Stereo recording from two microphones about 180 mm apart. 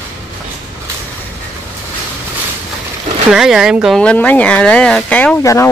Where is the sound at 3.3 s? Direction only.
Centre (ahead or behind).